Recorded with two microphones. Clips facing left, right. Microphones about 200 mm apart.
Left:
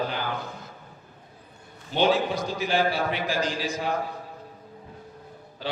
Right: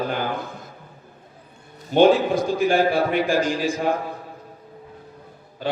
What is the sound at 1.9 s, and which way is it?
A man's voice, 50° right (ahead or behind).